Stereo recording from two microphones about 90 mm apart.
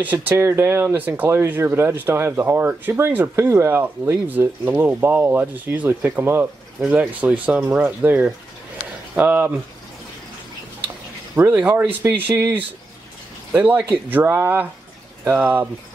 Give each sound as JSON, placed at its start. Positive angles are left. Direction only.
{"t": 0.0, "sound": "speech", "side_deg": -20}
{"t": 11.5, "sound": "speech", "side_deg": -15}
{"t": 13.5, "sound": "speech", "side_deg": -20}